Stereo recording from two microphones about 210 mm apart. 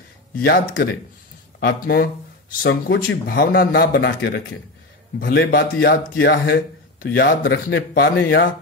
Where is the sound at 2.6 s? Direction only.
55° left (ahead or behind).